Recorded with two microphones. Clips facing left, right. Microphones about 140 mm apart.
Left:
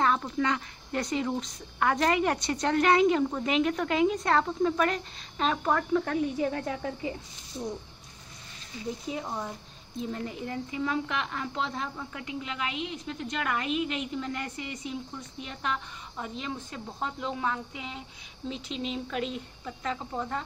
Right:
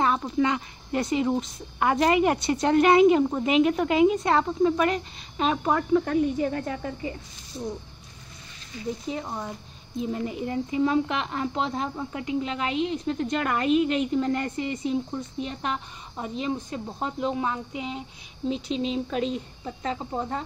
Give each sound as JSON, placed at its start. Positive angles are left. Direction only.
{"t": 0.0, "sound": "a woman's voice", "side_deg": -10}
{"t": 9.2, "sound": "speech", "side_deg": -5}
{"t": 9.9, "sound": "a woman's voice", "side_deg": -15}